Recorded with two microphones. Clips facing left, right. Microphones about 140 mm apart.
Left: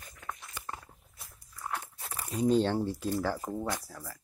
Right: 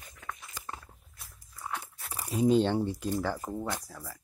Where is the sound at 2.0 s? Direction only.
10° right (ahead or behind).